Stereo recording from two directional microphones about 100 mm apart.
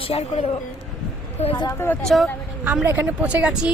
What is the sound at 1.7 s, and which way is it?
Speech, 20° left (ahead or behind).